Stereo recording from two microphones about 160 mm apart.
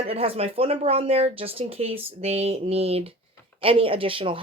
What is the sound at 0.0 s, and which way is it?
A woman's voice, 35° right (ahead or behind).